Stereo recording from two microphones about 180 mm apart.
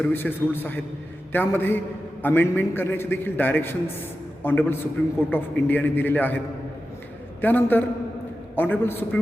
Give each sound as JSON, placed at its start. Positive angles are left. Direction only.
{"t": 0.0, "sound": "a man's voice", "side_deg": 10}
{"t": 7.4, "sound": "a man's voice", "side_deg": 10}